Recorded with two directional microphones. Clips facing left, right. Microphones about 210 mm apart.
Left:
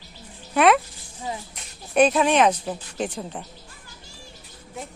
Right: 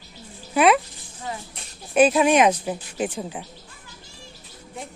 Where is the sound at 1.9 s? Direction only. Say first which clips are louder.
Right 2 dB; 5° right (ahead or behind).